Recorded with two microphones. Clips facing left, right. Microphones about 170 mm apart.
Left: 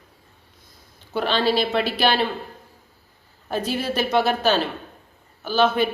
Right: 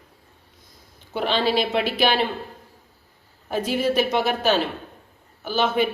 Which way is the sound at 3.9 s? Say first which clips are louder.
Left 4 dB; 15° right (ahead or behind).